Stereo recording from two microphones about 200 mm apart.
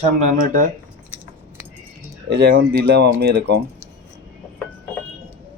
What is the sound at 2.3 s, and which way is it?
Speech, 55° right (ahead or behind).